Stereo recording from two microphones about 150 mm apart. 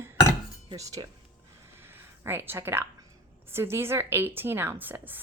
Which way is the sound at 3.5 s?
15° right (ahead or behind).